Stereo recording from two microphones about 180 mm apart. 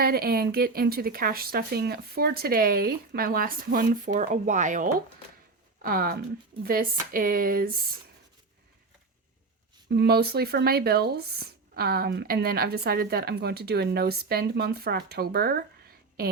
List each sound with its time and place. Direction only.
0.0 s speech: 55° right (ahead or behind)
9.9 s speech: 65° right (ahead or behind)